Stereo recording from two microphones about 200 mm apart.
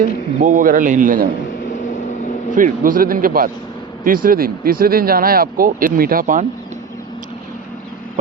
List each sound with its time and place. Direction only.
0.3 s a man's voice: 40° right (ahead or behind)
2.6 s speech: 40° right (ahead or behind)